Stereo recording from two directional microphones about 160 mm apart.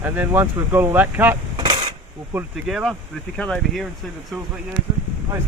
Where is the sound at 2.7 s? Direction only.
Centre (ahead or behind).